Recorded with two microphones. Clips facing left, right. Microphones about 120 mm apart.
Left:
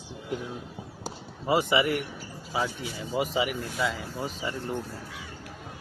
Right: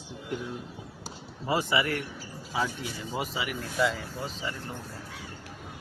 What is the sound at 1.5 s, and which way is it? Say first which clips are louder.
Speech: left 3 dB; 15° left (ahead or behind).